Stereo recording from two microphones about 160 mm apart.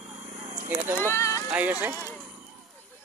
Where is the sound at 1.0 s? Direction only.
15° left (ahead or behind).